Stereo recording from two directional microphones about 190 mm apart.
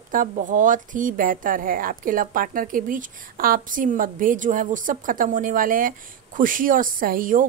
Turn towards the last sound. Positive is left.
turn(degrees=-45)  # may be behind; listen again after turning